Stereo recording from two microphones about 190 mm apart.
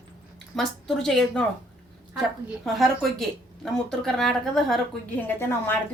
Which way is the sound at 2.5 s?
Centre (ahead or behind).